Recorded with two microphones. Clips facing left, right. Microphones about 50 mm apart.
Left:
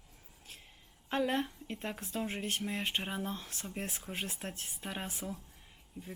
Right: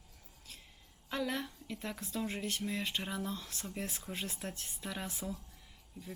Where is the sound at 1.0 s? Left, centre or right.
Left.